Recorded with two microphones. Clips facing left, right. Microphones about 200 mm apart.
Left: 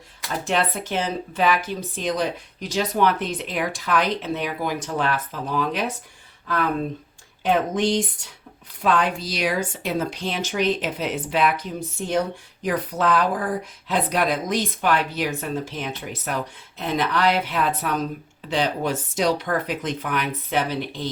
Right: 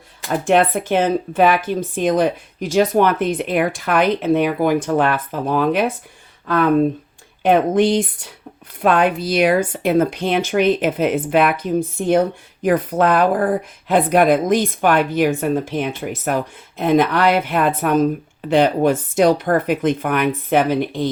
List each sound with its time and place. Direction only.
0.3 s speech: 55° right (ahead or behind)
7.4 s speech: 55° right (ahead or behind)